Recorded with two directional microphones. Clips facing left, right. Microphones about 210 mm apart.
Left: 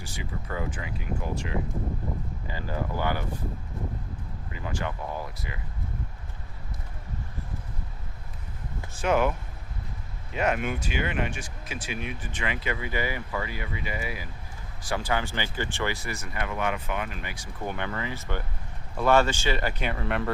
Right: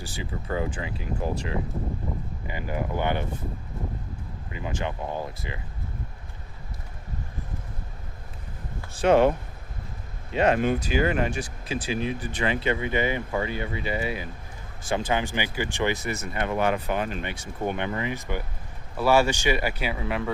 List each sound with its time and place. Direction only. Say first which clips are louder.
0.0 s speech: right 3 dB; 30° right (ahead or behind)
2.5 s speech: right 2 dB; 15° right (ahead or behind)
4.5 s speech: right 2 dB; 20° right (ahead or behind)
8.9 s speech: right 6 dB; 35° right (ahead or behind)
10.3 s speech: right 5 dB; 30° right (ahead or behind); by 20.3 s 5° right (ahead or behind)